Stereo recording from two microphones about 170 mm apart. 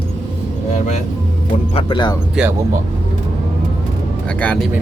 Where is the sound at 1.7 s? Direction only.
30° left (ahead or behind).